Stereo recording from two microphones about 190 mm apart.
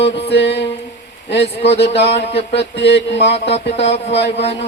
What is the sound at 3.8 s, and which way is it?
Speech, 35° left (ahead or behind).